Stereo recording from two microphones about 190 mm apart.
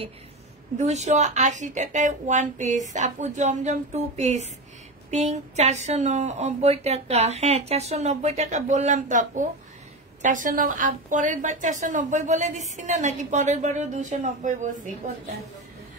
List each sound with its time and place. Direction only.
0.7 s a woman's voice: 35° right (ahead or behind)